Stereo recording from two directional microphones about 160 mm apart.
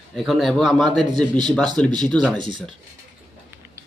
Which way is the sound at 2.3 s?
30° right (ahead or behind).